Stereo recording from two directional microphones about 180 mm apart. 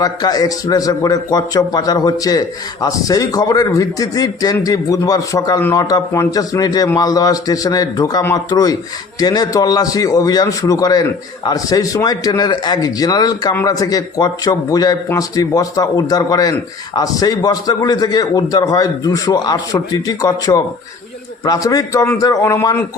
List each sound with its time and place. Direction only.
0.0 s a man's voice: 20° left (ahead or behind)